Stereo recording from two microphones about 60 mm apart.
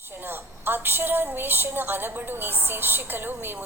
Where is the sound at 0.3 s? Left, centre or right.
Right.